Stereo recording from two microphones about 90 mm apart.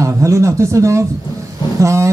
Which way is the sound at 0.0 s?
35° right (ahead or behind).